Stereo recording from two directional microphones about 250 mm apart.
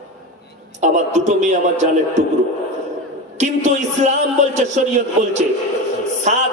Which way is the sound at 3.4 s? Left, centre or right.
Right.